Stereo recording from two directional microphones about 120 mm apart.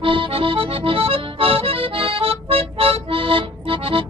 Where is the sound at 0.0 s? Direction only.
45° right (ahead or behind).